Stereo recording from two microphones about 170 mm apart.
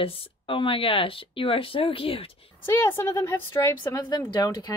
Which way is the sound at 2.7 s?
15° left (ahead or behind).